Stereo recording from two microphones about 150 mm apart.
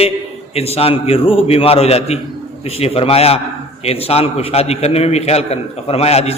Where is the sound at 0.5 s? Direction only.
40° left (ahead or behind).